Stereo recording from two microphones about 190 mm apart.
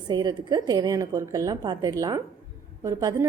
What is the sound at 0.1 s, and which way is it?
A woman's voice, 25° right (ahead or behind).